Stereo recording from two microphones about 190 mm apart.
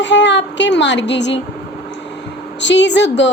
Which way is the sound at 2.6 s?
70° left (ahead or behind).